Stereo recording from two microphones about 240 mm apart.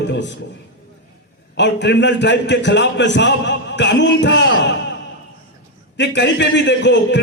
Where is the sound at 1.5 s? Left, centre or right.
Left.